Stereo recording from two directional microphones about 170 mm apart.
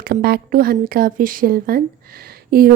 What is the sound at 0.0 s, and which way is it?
A woman's voice, 65° right (ahead or behind).